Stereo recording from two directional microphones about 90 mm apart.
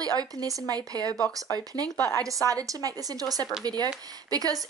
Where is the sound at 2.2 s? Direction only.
40° right (ahead or behind).